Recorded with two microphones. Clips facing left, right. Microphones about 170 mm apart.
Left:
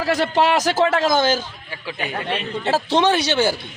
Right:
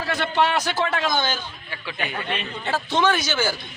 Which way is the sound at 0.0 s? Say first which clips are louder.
Left 4 dB; 40° left (ahead or behind).